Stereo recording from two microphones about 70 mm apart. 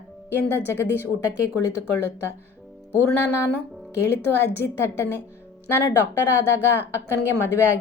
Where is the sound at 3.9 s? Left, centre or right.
Left.